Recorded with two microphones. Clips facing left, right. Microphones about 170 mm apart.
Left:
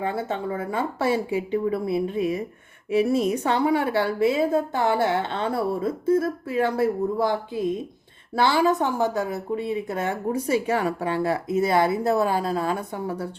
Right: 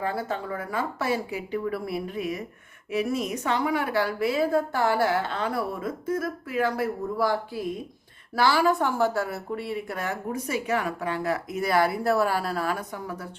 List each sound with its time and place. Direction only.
0.0 s a woman's voice: 25° left (ahead or behind)